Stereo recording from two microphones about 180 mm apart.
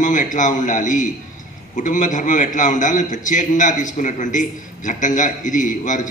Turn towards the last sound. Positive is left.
turn(degrees=45)  # may be behind; listen again after turning